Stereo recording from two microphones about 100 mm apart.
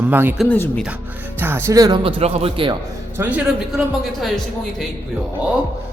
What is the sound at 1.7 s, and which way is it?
Speech, 35° right (ahead or behind).